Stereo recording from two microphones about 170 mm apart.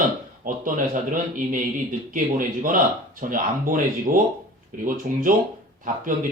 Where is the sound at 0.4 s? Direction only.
50° right (ahead or behind).